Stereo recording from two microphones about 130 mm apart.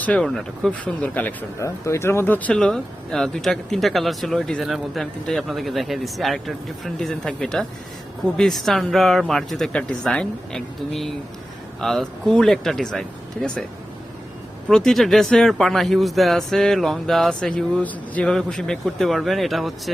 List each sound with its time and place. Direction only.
0.0 s a man's voice: 10° left (ahead or behind)
14.7 s a man's voice: 5° left (ahead or behind)